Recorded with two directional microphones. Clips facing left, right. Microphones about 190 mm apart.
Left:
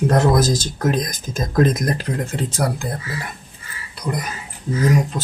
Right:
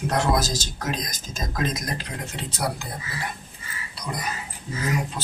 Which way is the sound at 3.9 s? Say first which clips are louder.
Left 8 dB; 50° left (ahead or behind).